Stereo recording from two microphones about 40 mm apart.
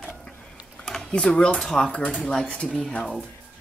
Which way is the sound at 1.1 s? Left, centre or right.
Left.